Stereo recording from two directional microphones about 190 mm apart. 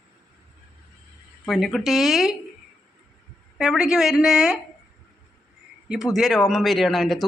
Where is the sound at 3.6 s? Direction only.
5° right (ahead or behind).